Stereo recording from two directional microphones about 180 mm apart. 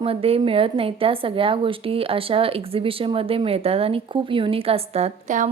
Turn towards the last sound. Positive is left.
turn(degrees=-40)  # may be behind; listen again after turning